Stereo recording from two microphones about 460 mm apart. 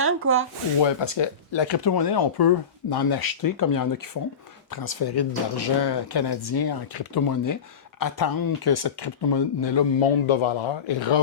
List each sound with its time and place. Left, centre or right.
0.0 s speech: right
0.8 s speech: left